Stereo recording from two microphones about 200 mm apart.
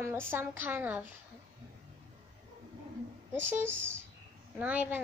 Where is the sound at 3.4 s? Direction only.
10° right (ahead or behind).